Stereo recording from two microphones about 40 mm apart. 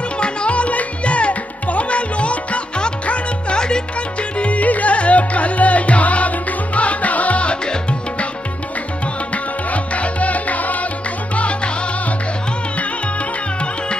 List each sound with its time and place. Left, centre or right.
0.2 s music: left
9.3 s music: left
11.3 s music: left